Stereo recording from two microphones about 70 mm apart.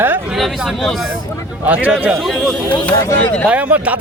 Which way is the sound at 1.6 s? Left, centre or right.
Right.